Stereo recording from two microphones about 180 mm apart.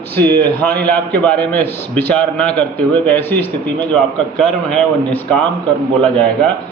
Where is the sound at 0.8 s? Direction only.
10° left (ahead or behind).